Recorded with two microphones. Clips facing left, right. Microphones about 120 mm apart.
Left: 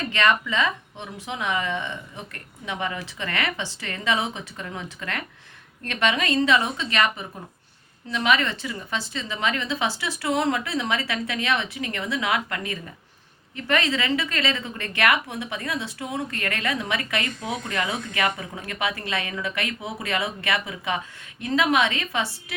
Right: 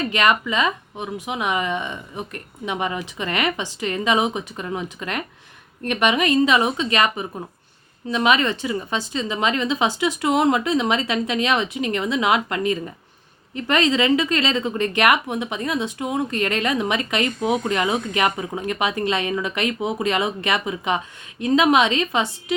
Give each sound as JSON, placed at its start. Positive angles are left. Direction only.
{"t": 0.1, "sound": "a woman's voice", "side_deg": -15}